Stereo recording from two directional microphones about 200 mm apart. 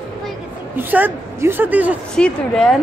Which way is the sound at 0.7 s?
10° right (ahead or behind).